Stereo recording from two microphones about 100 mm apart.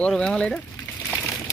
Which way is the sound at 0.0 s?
5° left (ahead or behind).